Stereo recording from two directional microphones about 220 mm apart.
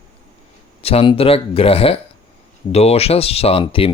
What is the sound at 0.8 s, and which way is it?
Speech, 25° left (ahead or behind).